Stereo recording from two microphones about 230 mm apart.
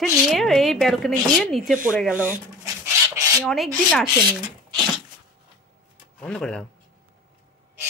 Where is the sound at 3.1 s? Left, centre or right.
Centre.